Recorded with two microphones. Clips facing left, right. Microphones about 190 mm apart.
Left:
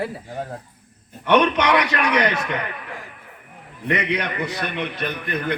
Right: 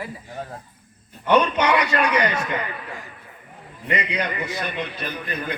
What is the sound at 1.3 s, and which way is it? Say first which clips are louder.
A man's voice: left 1 dB; 70° left (ahead or behind).